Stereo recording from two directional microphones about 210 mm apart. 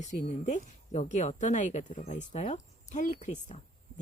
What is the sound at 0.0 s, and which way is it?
A woman's voice, 35° left (ahead or behind).